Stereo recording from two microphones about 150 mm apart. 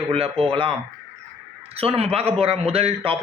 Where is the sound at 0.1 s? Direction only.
40° right (ahead or behind).